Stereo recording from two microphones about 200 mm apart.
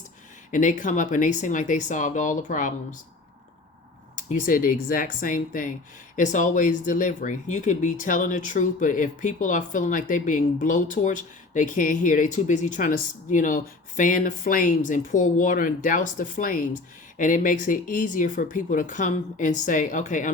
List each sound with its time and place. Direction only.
0.5 s speech: 40° left (ahead or behind)
4.1 s speech: 40° left (ahead or behind)